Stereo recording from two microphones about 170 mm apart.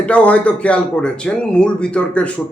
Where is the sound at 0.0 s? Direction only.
5° left (ahead or behind).